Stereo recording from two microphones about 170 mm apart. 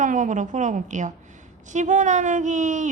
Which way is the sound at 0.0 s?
50° right (ahead or behind).